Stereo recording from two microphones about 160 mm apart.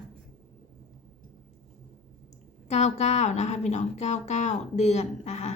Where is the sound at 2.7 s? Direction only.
45° left (ahead or behind).